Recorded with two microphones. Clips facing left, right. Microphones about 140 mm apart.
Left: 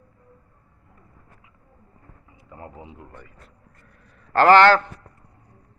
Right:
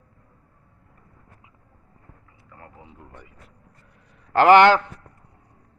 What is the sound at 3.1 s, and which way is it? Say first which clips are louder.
A man's voice: left 1 dB; 15° right (ahead or behind).